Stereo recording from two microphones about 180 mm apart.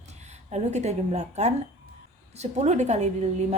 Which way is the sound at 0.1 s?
40° right (ahead or behind).